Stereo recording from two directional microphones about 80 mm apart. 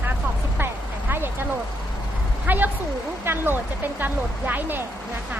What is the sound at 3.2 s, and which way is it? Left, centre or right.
A woman's voice, right.